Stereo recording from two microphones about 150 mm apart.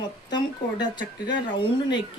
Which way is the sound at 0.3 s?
30° left (ahead or behind).